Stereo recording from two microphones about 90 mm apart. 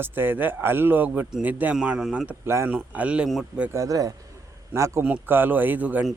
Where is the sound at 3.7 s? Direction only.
35° right (ahead or behind).